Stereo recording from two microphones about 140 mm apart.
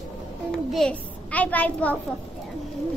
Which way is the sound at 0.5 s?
5° left (ahead or behind).